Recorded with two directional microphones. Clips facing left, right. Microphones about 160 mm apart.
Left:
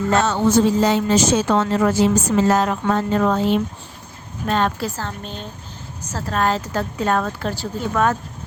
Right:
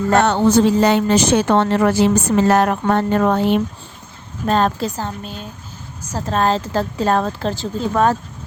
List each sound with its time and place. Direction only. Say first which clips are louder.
0.1 s speech: right 3 dB; 60° right (ahead or behind)
4.4 s speech: right 3 dB; 35° right (ahead or behind)
4.8 s a woman's voice: right 3 dB; 15° right (ahead or behind)
6.3 s speech: right 3 dB; 30° right (ahead or behind)